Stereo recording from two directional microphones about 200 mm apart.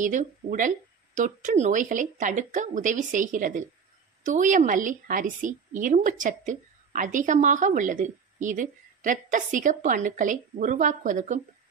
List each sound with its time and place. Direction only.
0.0 s a woman's voice: 40° right (ahead or behind)